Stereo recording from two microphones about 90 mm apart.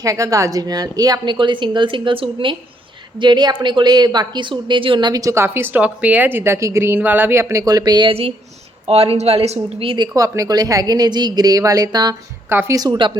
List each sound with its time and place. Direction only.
0.0 s a woman's voice: 40° right (ahead or behind); by 2.6 s 80° right
3.2 s a woman's voice: 55° right (ahead or behind)
5.2 s a woman's voice: 30° right (ahead or behind); by 8.0 s 45° right (ahead or behind)
8.0 s a woman's voice: 90° right; by 10.1 s 70° right (ahead or behind)
10.2 s speech: 40° right (ahead or behind)
12.5 s speech: 25° right (ahead or behind)
12.7 s speech: 50° right (ahead or behind)